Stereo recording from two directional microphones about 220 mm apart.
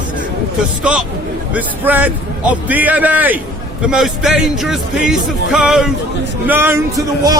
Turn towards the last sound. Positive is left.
turn(degrees=-15)  # may be behind; listen again after turning